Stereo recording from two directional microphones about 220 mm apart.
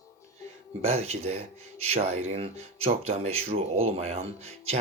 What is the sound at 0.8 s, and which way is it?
Speech, 30° right (ahead or behind).